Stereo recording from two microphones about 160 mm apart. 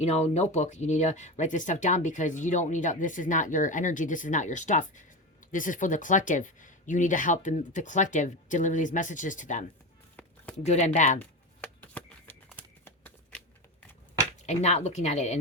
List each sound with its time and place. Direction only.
0.0 s speech: 45° left (ahead or behind)
10.7 s speech: 45° left (ahead or behind)
11.2 s shuffling cards: 10° left (ahead or behind)
12.5 s a sound: 10° left (ahead or behind)
14.3 s speech: 45° left (ahead or behind)